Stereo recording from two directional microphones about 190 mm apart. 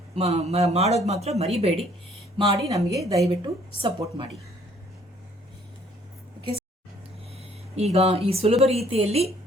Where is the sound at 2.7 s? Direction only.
15° right (ahead or behind).